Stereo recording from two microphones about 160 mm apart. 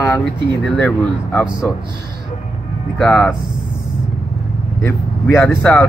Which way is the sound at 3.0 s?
10° left (ahead or behind).